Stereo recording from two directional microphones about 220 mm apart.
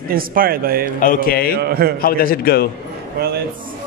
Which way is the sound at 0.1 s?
40° right (ahead or behind).